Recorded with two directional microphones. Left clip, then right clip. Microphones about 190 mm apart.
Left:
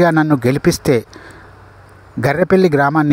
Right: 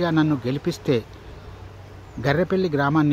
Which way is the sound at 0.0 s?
45° left (ahead or behind).